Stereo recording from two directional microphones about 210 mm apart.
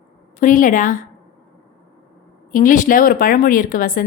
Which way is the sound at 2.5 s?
40° left (ahead or behind).